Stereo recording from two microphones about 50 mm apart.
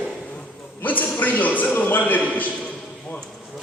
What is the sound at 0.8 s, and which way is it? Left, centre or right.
A man's voice, left.